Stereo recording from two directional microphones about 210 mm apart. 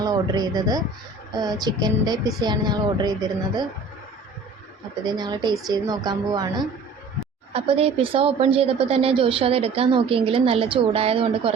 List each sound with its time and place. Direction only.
0.0 s a woman's voice: 20° right (ahead or behind)
5.0 s a woman's voice: 20° right (ahead or behind)